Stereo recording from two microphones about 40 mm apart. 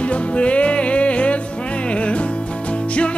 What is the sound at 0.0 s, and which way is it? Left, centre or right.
Music, left.